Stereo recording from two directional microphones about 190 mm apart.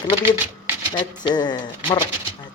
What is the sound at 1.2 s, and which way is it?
Speech, 20° left (ahead or behind).